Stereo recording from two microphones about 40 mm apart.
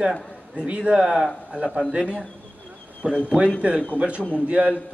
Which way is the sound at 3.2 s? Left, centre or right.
Right.